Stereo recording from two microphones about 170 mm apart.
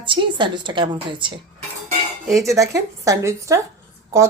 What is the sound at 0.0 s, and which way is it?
A woman's voice, 30° right (ahead or behind).